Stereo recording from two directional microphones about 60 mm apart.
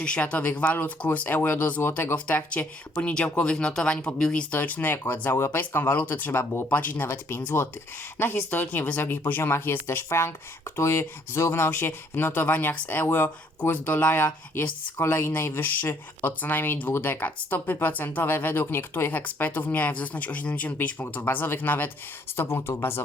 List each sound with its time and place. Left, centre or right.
0.0 s speech: centre
3.4 s speech: centre
4.5 s speech: left
7.1 s speech: left
22.4 s speech: left